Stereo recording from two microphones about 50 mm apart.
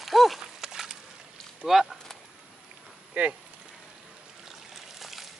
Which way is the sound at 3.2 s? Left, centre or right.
Right.